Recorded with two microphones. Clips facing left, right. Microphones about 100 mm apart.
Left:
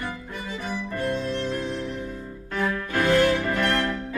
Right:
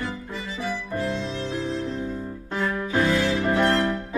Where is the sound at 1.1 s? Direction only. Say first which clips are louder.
Left 2 dB; 55° left (ahead or behind).